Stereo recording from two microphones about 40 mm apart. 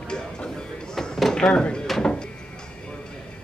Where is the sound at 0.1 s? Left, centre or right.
Centre.